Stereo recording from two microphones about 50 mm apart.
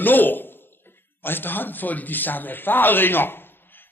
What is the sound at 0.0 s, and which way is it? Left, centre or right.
A man's voice, left.